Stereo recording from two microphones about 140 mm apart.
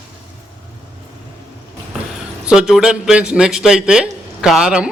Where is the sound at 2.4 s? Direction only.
5° right (ahead or behind).